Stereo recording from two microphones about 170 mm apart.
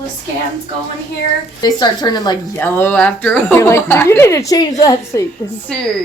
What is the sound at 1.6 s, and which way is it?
Speech, 25° left (ahead or behind).